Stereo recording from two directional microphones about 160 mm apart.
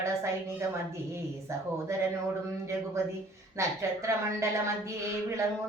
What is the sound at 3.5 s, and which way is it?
Female singing, 20° right (ahead or behind).